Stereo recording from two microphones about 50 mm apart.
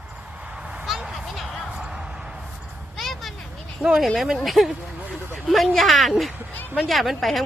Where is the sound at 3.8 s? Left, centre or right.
Centre.